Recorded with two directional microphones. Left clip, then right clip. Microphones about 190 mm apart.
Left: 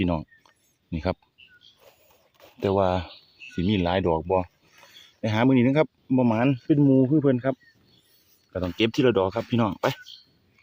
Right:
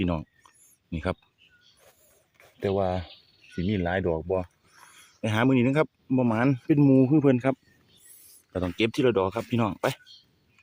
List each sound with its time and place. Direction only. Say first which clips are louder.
0.0 s a sound: left 3 dB; 5° left (ahead or behind)
2.6 s speech: left 4 dB; 25° left (ahead or behind)
5.2 s speech: left 2 dB; 5° left (ahead or behind); by 7.5 s 10° right (ahead or behind)
8.6 s speech: left 2 dB; 10° left (ahead or behind)